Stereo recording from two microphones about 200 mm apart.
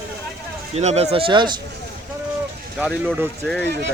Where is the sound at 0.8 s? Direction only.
35° right (ahead or behind).